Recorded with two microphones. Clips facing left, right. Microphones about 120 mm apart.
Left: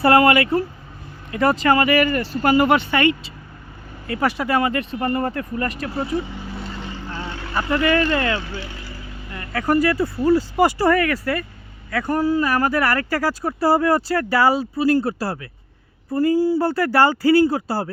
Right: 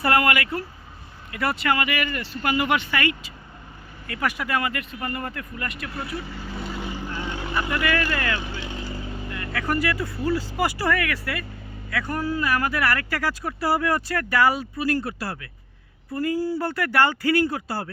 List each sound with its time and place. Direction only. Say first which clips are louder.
0.0 s speech: left 7 dB; 30° left (ahead or behind)
6.5 s vehicle: even; centre (ahead or behind)
7.7 s speech: left 8 dB; 30° left (ahead or behind)
8.6 s vehicle: right 3 dB; 20° right (ahead or behind)
9.3 s speech: left 7 dB; 35° left (ahead or behind)